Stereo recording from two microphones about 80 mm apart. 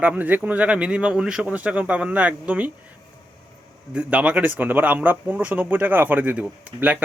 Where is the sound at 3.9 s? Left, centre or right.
Centre.